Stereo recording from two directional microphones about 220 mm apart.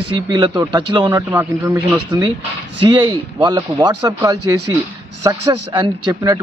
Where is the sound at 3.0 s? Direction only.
20° right (ahead or behind).